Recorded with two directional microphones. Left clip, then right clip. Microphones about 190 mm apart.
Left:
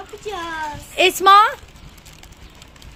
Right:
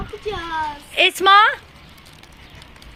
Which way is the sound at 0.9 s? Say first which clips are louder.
Left 1 dB; centre (ahead or behind).